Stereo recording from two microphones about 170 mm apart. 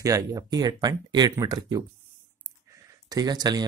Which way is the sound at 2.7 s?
20° right (ahead or behind).